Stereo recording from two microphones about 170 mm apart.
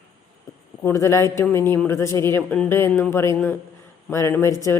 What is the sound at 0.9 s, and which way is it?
A woman's voice, 15° left (ahead or behind).